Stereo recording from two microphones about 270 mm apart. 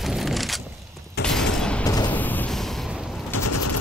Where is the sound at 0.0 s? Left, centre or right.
Centre.